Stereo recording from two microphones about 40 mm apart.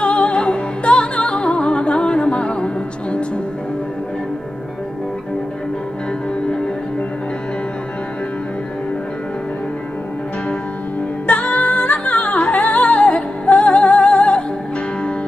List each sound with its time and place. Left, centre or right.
0.0 s music: left
11.2 s music: left
11.6 s music: left